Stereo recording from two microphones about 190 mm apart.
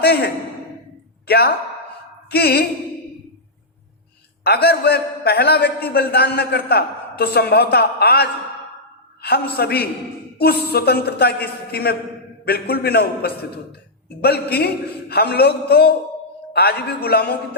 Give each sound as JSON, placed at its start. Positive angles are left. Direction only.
{"t": 0.0, "sound": "speech", "side_deg": 55}
{"t": 1.3, "sound": "a man's voice", "side_deg": 55}
{"t": 4.4, "sound": "a man's voice", "side_deg": 55}